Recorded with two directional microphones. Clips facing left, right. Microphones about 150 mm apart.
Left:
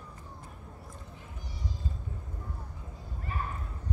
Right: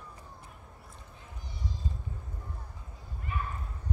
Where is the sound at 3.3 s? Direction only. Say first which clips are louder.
Even; 35° left (ahead or behind).